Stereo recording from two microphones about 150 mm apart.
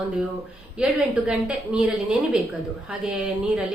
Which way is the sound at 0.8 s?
5° right (ahead or behind).